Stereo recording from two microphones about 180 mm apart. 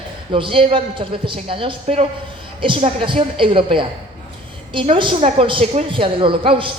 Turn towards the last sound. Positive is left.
turn(degrees=-30)  # may be behind; listen again after turning